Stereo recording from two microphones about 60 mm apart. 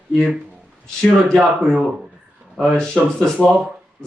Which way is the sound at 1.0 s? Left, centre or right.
Centre.